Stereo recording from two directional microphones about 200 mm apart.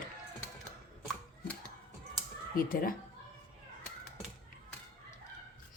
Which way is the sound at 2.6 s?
45° left (ahead or behind).